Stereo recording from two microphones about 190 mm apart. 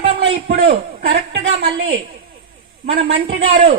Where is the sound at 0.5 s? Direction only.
60° right (ahead or behind).